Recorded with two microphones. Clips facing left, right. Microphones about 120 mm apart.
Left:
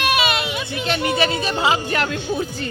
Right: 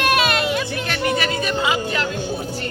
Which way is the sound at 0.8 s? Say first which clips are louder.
Left 5 dB; 25° left (ahead or behind).